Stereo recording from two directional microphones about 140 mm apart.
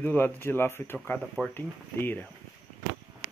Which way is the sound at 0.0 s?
15° left (ahead or behind).